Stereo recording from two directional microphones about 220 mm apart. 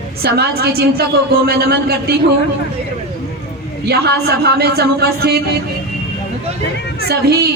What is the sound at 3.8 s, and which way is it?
A man's voice, 45° right (ahead or behind).